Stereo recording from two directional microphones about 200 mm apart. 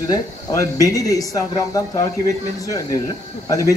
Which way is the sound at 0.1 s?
20° left (ahead or behind).